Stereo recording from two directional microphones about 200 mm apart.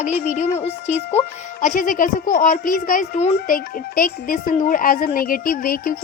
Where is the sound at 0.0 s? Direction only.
35° left (ahead or behind).